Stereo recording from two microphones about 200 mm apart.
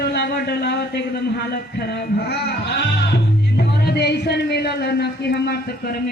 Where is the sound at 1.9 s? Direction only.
55° left (ahead or behind).